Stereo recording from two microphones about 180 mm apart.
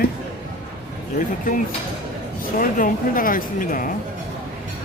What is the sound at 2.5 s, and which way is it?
Speech, 50° left (ahead or behind).